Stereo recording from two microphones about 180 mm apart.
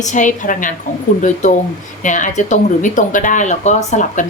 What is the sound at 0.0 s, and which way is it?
A woman's voice, 45° left (ahead or behind).